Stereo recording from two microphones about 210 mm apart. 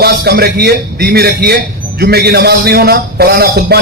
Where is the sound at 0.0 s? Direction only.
50° right (ahead or behind).